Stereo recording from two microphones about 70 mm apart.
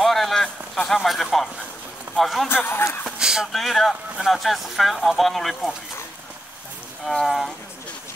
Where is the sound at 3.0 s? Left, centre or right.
Centre.